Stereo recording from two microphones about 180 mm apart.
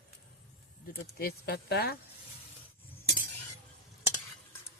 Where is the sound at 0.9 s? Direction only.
55° left (ahead or behind).